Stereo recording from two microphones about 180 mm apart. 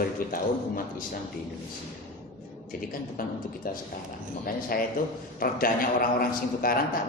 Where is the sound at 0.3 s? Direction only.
50° left (ahead or behind).